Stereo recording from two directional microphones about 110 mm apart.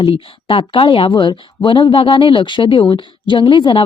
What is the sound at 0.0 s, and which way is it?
A woman's voice, 50° left (ahead or behind).